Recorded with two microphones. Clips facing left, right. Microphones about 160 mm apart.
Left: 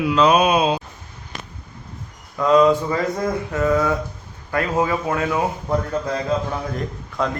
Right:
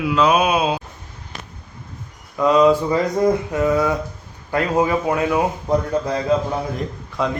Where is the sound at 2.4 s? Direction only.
10° right (ahead or behind).